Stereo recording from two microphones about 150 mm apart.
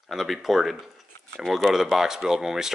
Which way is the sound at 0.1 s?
Centre (ahead or behind).